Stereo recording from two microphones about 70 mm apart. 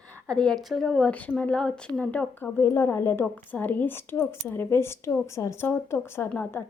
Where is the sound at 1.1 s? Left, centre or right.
Left.